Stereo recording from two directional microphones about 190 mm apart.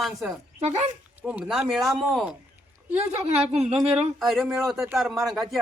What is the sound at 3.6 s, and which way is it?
Speech, 5° right (ahead or behind).